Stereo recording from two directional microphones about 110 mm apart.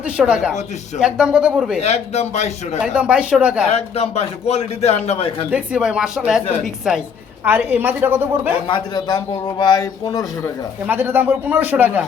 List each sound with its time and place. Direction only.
0.2 s speech: 10° right (ahead or behind)
1.8 s a man's voice: 80° left
2.8 s speech: 10° right (ahead or behind)
3.7 s a man's voice: 70° left (ahead or behind)
5.5 s a woman's voice: 10° right (ahead or behind)
7.4 s speech: 15° right (ahead or behind)
8.6 s a man's voice: 40° left (ahead or behind)
10.8 s speech: 15° right (ahead or behind)